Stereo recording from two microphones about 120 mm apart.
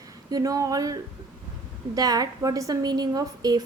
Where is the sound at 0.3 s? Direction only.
30° right (ahead or behind).